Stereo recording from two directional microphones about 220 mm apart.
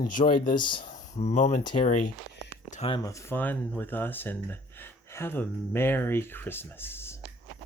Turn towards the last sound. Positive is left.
turn(degrees=10)  # may be behind; listen again after turning